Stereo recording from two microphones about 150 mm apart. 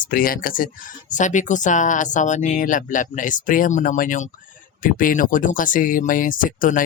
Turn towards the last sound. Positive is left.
turn(degrees=65)  # may be behind; listen again after turning